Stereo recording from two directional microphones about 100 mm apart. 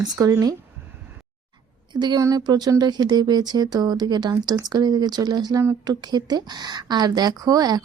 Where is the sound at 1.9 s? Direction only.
50° right (ahead or behind).